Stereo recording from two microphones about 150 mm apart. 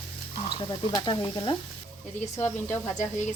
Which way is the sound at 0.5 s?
35° left (ahead or behind).